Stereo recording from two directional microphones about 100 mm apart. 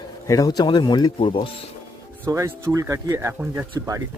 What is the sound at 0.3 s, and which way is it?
Speech, 40° left (ahead or behind).